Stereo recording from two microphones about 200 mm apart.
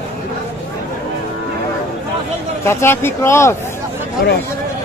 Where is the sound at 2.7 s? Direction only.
15° left (ahead or behind).